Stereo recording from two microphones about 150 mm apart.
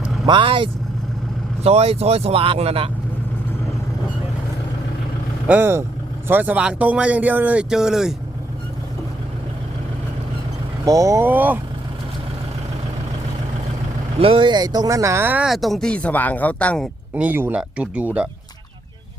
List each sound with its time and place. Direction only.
0.3 s speech: 35° right (ahead or behind)
5.5 s speech: 15° right (ahead or behind)
10.8 s speech: 20° right (ahead or behind)
14.2 s speech: 35° right (ahead or behind); by 16.9 s 5° left (ahead or behind)
17.2 s speech: 10° right (ahead or behind)